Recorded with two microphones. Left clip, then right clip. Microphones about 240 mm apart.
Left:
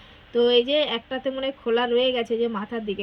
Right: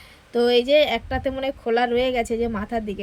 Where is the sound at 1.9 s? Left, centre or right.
Right.